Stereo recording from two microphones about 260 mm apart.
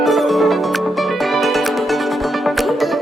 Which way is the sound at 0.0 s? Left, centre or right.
Centre.